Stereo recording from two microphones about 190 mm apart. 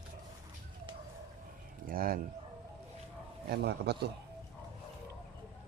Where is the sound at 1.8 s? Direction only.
50° right (ahead or behind).